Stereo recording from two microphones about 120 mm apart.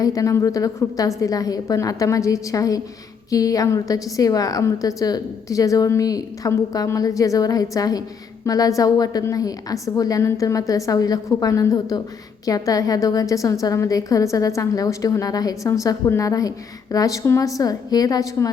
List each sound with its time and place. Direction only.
0.0 s a woman's voice: 30° left (ahead or behind)